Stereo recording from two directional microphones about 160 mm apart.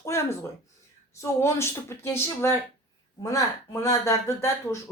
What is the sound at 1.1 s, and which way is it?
Speech, 20° left (ahead or behind).